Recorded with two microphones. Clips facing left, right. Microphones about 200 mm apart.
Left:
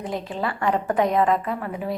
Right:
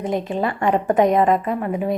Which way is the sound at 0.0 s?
20° right (ahead or behind).